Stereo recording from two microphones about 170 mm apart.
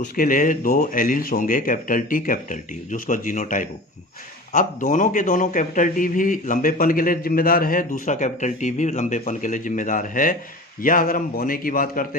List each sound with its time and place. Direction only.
0.0 s a man's voice: 55° left (ahead or behind)